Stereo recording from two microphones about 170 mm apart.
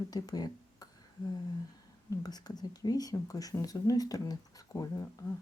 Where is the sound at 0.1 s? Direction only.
20° left (ahead or behind).